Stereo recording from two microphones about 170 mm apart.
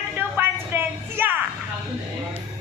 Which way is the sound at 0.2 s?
10° right (ahead or behind).